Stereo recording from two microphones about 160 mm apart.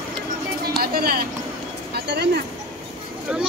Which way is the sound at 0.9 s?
70° right (ahead or behind).